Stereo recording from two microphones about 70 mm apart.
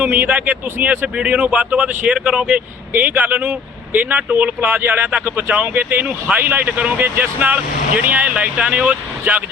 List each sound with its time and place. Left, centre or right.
0.0 s speech: right
2.9 s speech: right